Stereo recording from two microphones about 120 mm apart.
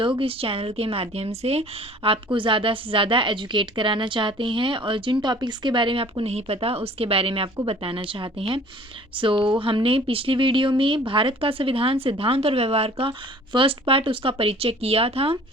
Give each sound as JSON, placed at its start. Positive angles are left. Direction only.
{"t": 0.2, "sound": "speech", "side_deg": -50}
{"t": 2.0, "sound": "speech", "side_deg": -45}